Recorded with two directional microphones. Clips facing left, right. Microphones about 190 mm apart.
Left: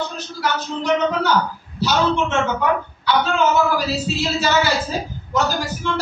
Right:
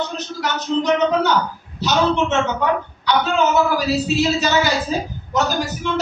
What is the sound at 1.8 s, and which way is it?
A man's voice, 20° right (ahead or behind).